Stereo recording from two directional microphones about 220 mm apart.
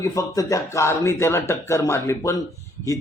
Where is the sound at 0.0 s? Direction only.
15° left (ahead or behind).